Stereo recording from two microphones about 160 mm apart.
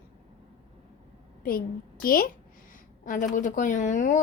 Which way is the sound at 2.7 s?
55° left (ahead or behind).